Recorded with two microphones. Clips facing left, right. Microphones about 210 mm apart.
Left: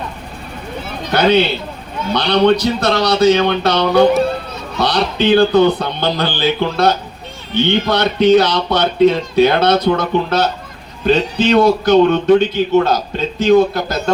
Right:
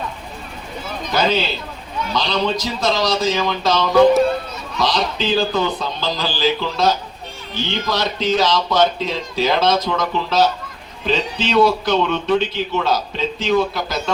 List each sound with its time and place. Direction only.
1.1 s speech: 65° left (ahead or behind)
11.0 s speech: 50° left (ahead or behind)